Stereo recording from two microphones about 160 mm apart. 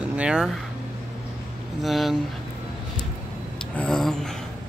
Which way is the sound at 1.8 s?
Centre (ahead or behind).